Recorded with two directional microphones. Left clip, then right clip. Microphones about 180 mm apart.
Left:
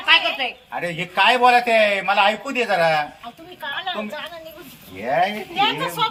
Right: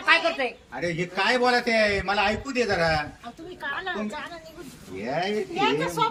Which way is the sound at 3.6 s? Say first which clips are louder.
Left 4 dB; 10° right (ahead or behind).